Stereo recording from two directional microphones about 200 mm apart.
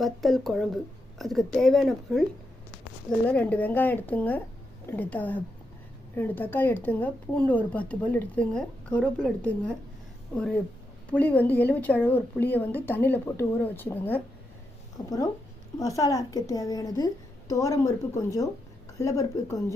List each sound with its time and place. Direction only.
0.0 s a woman's voice: centre (ahead or behind)
3.2 s a woman's voice: 5° left (ahead or behind)